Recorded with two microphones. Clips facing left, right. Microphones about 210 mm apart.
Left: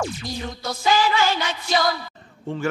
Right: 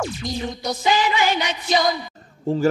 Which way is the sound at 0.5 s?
20° right (ahead or behind).